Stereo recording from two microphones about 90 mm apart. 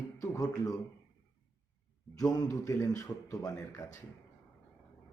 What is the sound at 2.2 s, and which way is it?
Speech, 40° left (ahead or behind).